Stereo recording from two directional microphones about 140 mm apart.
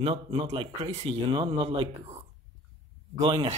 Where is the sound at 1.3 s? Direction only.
35° right (ahead or behind).